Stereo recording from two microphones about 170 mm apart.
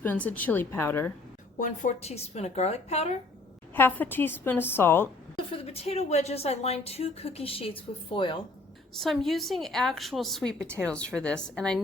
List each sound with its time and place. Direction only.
0.0 s a woman's voice: 10° left (ahead or behind)
1.5 s speech: 50° left (ahead or behind)
3.8 s a woman's voice: 10° left (ahead or behind)
5.5 s speech: 35° left (ahead or behind)
9.0 s a woman's voice: centre (ahead or behind)